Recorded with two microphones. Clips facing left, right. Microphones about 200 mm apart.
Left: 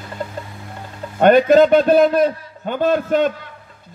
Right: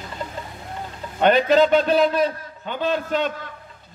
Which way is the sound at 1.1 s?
50° left (ahead or behind).